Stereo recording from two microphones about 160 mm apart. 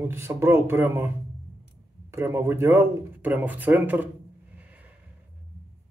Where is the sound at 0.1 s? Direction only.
15° right (ahead or behind).